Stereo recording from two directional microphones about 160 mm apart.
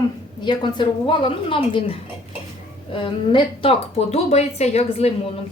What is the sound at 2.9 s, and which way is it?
A woman's voice, 30° left (ahead or behind).